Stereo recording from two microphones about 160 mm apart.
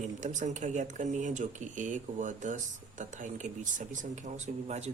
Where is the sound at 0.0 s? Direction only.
50° right (ahead or behind).